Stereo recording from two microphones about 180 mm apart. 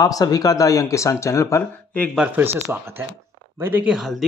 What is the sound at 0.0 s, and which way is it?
Speech, 20° left (ahead or behind).